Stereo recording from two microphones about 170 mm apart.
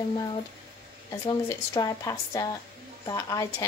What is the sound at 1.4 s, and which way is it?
Speech, 20° left (ahead or behind).